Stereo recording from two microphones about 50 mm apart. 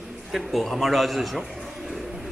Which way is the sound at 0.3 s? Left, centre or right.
Centre.